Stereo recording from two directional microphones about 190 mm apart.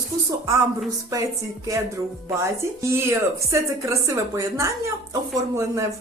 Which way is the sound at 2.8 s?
15° right (ahead or behind).